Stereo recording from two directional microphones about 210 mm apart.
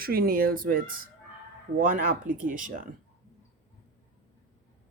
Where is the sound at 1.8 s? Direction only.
40° right (ahead or behind).